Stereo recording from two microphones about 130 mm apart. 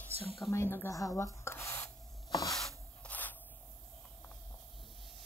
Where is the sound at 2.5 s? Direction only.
5° left (ahead or behind).